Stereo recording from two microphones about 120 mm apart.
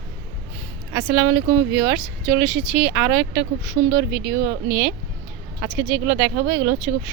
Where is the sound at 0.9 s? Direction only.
30° right (ahead or behind).